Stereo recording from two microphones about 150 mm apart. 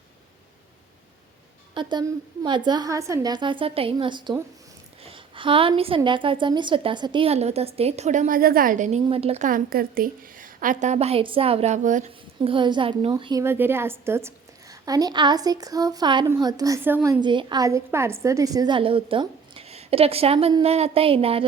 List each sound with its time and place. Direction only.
1.7 s a woman's voice: 30° right (ahead or behind)
5.0 s a sound: 35° right (ahead or behind)
6.0 s a woman's voice: 35° right (ahead or behind); by 9.0 s 55° right (ahead or behind)
9.0 s a woman's voice: 40° right (ahead or behind)
9.5 s a woman's voice: 70° right (ahead or behind); by 12.1 s 55° right (ahead or behind)
12.5 s a woman's voice: 30° right (ahead or behind)
13.4 s a woman's voice: 15° right (ahead or behind); by 21.4 s 40° right (ahead or behind)